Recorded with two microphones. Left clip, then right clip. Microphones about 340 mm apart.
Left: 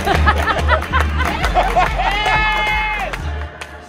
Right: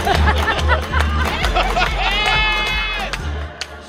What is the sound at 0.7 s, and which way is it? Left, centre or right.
Music, left.